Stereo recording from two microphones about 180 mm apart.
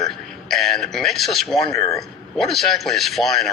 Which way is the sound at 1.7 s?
20° left (ahead or behind).